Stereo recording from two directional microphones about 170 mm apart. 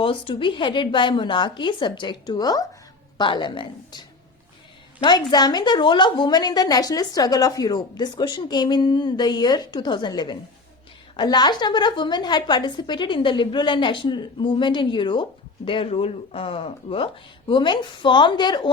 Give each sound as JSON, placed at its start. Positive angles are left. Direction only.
{"t": 0.0, "sound": "a woman's voice", "side_deg": 30}
{"t": 5.0, "sound": "a woman's voice", "side_deg": 25}